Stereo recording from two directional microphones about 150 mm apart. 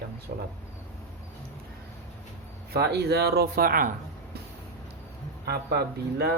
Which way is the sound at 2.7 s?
90° right.